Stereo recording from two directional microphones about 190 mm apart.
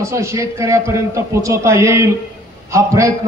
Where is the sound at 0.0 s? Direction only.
15° right (ahead or behind).